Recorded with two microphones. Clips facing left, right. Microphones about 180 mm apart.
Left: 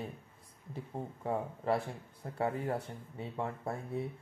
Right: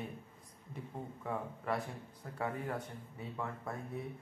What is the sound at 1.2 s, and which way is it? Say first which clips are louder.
Speech: left 5 dB; 30° left (ahead or behind).